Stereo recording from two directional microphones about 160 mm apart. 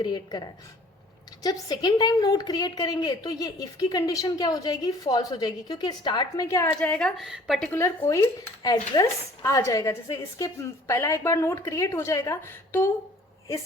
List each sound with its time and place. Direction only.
0.0 s a woman's voice: 25° left (ahead or behind)
6.7 s speech: 5° left (ahead or behind)
7.7 s a woman's voice: 15° left (ahead or behind)